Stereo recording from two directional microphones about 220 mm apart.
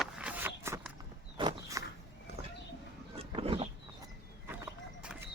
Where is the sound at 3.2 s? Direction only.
25° right (ahead or behind).